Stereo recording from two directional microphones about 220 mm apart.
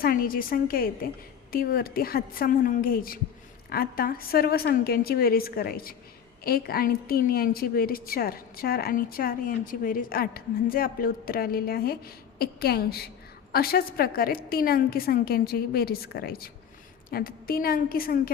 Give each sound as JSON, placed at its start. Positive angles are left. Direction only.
{"t": 0.0, "sound": "a woman's voice", "side_deg": 40}